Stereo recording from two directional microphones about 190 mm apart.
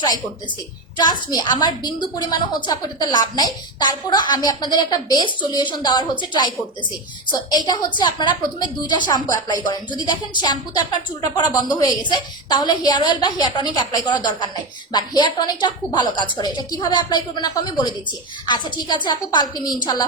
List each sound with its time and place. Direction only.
0.9 s a woman's voice: 20° left (ahead or behind)
7.5 s a woman's voice: 20° left (ahead or behind)